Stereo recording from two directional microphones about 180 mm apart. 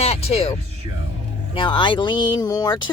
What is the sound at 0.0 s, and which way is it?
Speech, 35° left (ahead or behind).